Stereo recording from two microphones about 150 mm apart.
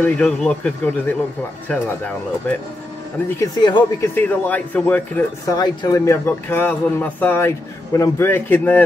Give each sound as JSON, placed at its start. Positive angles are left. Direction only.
{"t": 0.0, "sound": "a man's voice", "side_deg": 10}
{"t": 3.3, "sound": "speech", "side_deg": 25}
{"t": 4.1, "sound": "a man's voice", "side_deg": 15}
{"t": 5.5, "sound": "a man's voice", "side_deg": 25}